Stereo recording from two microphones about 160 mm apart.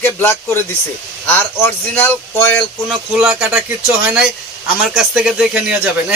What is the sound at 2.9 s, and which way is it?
Speech, 5° right (ahead or behind).